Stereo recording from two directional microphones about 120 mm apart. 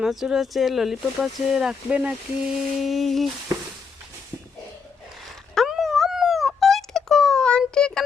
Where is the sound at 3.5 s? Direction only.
25° right (ahead or behind).